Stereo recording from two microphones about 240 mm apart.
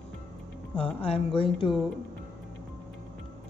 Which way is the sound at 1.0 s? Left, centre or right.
Left.